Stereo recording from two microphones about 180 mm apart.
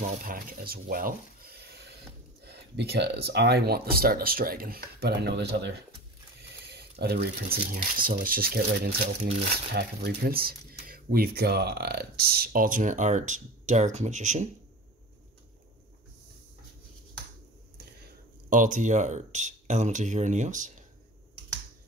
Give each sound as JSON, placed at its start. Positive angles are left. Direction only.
{"t": 0.0, "sound": "speech", "side_deg": -50}
{"t": 6.4, "sound": "a sound", "side_deg": -65}
{"t": 7.7, "sound": "speech", "side_deg": -50}
{"t": 18.0, "sound": "speech", "side_deg": -45}